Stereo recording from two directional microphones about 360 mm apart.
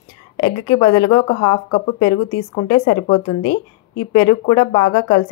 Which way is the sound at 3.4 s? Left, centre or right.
Left.